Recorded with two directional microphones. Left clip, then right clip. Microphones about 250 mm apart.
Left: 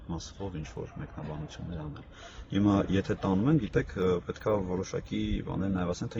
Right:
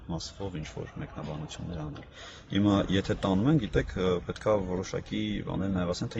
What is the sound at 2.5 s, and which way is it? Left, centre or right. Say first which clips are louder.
Speech: right 1 dB; centre.